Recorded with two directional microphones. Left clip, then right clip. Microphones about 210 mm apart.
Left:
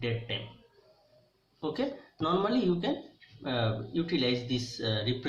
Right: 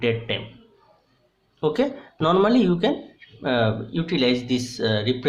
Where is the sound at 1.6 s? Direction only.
50° right (ahead or behind).